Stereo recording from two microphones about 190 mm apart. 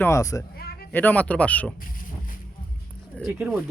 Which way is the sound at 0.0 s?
15° left (ahead or behind).